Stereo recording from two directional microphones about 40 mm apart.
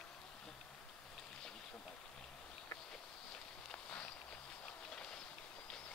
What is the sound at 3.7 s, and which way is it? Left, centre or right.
Walk, left.